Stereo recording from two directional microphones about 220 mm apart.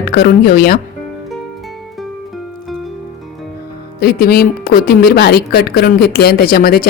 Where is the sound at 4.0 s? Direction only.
45° left (ahead or behind).